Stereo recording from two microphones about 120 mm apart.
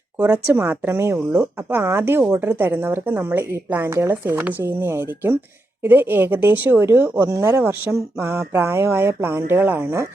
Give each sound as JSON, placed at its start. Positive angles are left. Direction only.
{"t": 0.2, "sound": "speech", "side_deg": -15}